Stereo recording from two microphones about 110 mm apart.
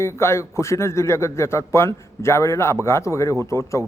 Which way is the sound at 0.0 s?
25° left (ahead or behind).